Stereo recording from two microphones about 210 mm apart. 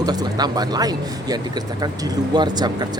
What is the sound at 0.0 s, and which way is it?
Speech, 20° right (ahead or behind).